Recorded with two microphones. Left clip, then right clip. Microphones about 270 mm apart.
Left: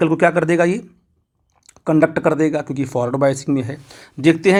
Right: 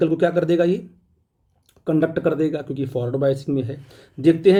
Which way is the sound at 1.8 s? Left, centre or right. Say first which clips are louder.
Left 5 dB; centre.